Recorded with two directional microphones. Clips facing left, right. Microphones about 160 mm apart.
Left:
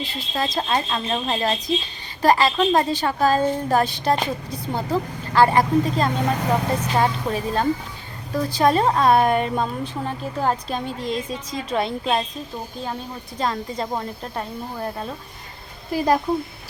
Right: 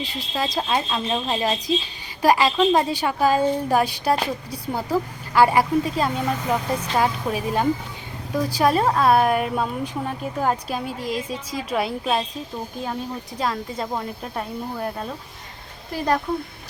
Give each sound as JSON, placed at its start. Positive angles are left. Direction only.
{"t": 0.0, "sound": "speech", "side_deg": -10}
{"t": 6.7, "sound": "speech", "side_deg": 10}
{"t": 7.0, "sound": "speech", "side_deg": -10}
{"t": 13.4, "sound": "speech", "side_deg": 0}
{"t": 15.9, "sound": "speech", "side_deg": 10}